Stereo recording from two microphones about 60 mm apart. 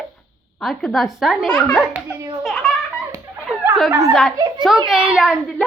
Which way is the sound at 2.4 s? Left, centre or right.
Centre.